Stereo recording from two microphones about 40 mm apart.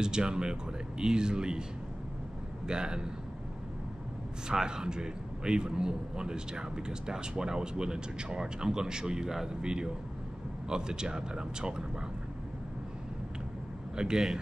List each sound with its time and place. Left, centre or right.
0.0 s a man's voice: right
2.6 s a man's voice: right
4.5 s a man's voice: centre
13.9 s a man's voice: centre